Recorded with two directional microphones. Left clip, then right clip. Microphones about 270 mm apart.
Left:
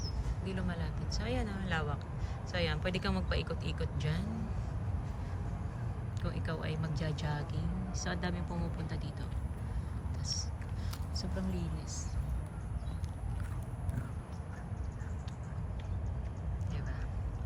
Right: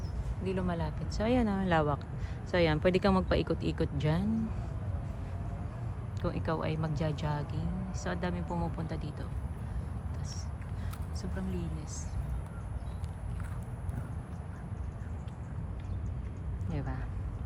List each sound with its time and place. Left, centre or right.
0.4 s speech: centre
6.2 s speech: centre
11.2 s speech: centre